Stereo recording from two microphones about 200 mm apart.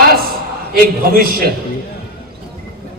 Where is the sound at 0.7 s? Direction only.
45° right (ahead or behind).